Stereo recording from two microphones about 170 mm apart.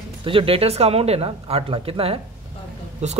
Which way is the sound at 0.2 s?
30° right (ahead or behind).